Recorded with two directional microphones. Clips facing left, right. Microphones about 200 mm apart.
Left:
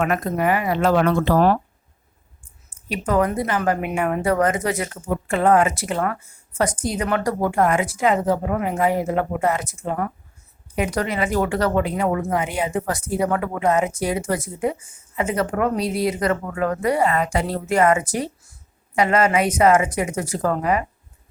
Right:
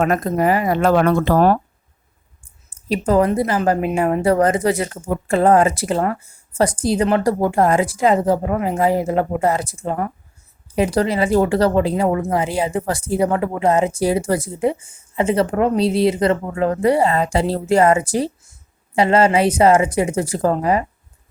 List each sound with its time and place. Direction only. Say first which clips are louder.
0.0 s speech: right 4 dB; 35° right (ahead or behind)
2.6 s a woman's voice: right 6 dB; 30° right (ahead or behind)